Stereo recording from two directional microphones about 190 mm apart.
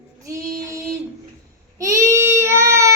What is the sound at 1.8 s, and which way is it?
Child singing, 15° right (ahead or behind).